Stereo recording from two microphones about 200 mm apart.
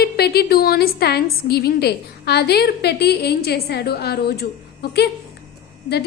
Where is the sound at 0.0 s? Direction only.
50° left (ahead or behind).